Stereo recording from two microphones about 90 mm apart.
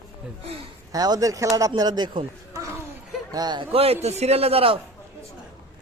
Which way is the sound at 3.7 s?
90° right.